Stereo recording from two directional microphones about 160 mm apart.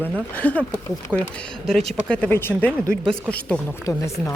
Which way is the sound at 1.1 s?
10° right (ahead or behind).